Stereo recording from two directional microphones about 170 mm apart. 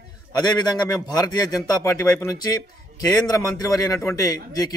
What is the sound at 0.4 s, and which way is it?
A man's voice, 25° left (ahead or behind).